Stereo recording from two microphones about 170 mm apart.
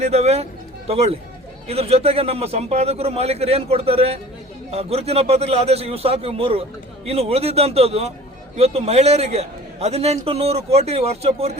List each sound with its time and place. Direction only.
0.0 s a man's voice: 40° right (ahead or behind)